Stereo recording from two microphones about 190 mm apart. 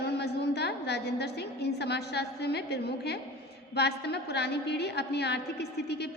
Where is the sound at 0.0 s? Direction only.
60° left (ahead or behind).